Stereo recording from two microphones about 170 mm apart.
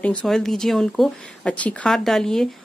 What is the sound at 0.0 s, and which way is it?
Speech, 5° left (ahead or behind).